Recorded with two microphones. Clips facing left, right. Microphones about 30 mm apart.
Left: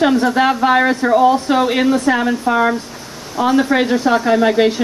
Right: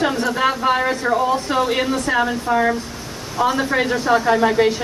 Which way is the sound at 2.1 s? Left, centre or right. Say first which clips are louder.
Even; left.